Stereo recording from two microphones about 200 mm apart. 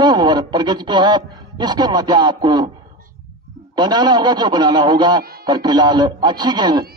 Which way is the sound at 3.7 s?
20° right (ahead or behind).